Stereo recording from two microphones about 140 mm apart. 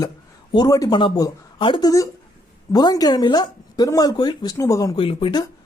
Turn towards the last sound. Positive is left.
turn(degrees=40)  # may be behind; listen again after turning